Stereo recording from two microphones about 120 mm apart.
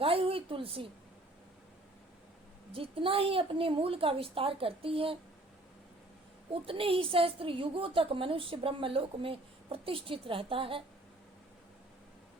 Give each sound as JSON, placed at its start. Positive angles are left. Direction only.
{"t": 0.0, "sound": "a woman's voice", "side_deg": -50}
{"t": 2.7, "sound": "a woman's voice", "side_deg": -50}
{"t": 6.5, "sound": "a woman's voice", "side_deg": -50}